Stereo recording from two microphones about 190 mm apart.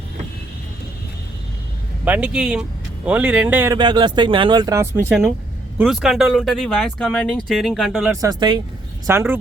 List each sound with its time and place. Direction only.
2.0 s speech: 5° right (ahead or behind)
3.8 s speech: 25° right (ahead or behind); by 8.1 s centre (ahead or behind)
8.2 s speech: 20° right (ahead or behind)
9.0 s speech: 10° right (ahead or behind)